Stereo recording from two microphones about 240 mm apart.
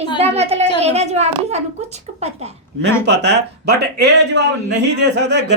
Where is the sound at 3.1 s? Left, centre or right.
Right.